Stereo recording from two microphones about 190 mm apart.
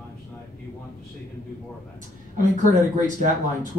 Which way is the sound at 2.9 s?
45° right (ahead or behind).